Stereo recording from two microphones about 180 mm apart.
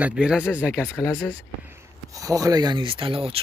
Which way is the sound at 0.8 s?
15° left (ahead or behind).